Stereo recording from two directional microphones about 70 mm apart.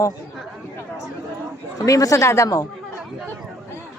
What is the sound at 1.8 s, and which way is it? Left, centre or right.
Speech, left.